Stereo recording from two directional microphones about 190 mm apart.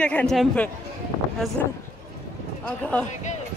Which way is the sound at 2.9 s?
5° left (ahead or behind).